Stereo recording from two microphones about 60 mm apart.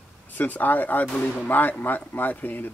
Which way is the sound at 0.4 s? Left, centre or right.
Left.